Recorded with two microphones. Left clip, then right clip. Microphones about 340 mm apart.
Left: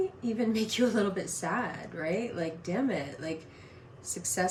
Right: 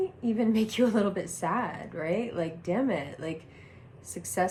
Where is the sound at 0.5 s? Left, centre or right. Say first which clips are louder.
Right 1 dB; centre.